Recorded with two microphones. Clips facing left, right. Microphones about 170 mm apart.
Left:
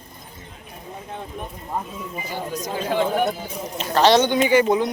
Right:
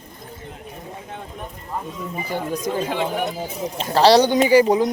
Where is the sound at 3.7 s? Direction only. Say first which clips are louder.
Right 2 dB; 30° right (ahead or behind).